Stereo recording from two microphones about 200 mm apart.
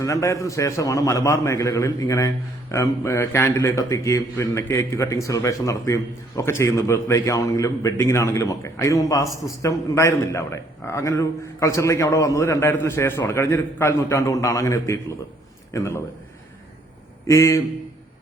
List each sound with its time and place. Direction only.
0.0 s a man's voice: 15° left (ahead or behind)
17.2 s a man's voice: 15° left (ahead or behind)